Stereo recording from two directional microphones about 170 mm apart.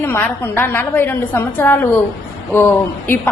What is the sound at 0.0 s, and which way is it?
A woman's voice, 10° left (ahead or behind).